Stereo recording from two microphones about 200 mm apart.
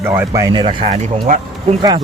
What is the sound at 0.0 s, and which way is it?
Speech, 15° right (ahead or behind).